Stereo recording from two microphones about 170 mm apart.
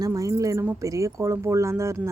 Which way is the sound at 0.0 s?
20° right (ahead or behind).